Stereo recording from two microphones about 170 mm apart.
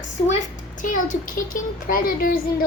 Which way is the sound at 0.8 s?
50° left (ahead or behind).